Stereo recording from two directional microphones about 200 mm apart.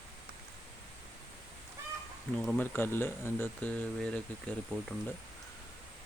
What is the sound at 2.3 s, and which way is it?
Speech, 5° left (ahead or behind).